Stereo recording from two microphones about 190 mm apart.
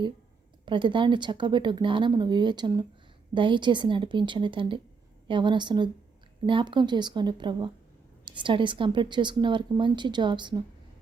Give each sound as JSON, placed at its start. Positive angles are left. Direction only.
{"t": 0.6, "sound": "a woman's voice", "side_deg": -25}